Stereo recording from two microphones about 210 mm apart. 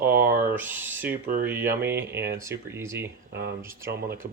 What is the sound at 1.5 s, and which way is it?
Speech, 10° right (ahead or behind).